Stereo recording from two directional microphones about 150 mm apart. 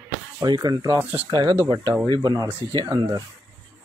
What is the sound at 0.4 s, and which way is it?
Speech, 25° right (ahead or behind).